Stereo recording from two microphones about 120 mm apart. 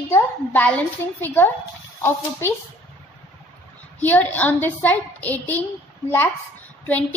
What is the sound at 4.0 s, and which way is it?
A woman's voice, 15° left (ahead or behind).